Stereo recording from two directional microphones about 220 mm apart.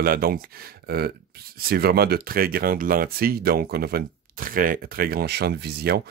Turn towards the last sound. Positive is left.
turn(degrees=-45)  # may be behind; listen again after turning